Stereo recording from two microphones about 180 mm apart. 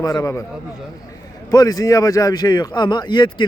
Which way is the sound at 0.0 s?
15° left (ahead or behind).